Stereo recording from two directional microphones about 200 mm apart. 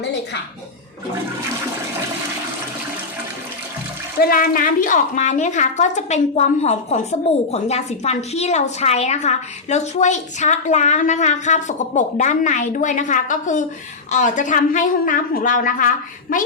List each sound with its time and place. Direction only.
4.2 s a woman's voice: 45° left (ahead or behind)